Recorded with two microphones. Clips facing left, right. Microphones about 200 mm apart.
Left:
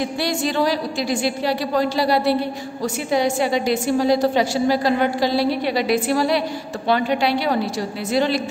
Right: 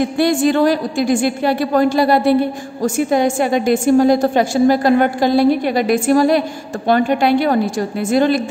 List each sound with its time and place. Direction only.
0.0 s a woman's voice: 50° right (ahead or behind)